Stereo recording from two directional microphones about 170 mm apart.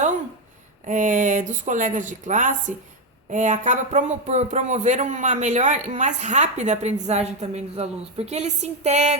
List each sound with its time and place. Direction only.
0.9 s a man's voice: 50° right (ahead or behind)